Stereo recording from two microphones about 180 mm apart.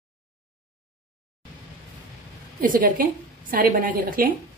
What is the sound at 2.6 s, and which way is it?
A woman's voice, 50° right (ahead or behind).